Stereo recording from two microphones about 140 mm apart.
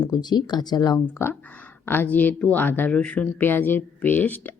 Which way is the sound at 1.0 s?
15° left (ahead or behind).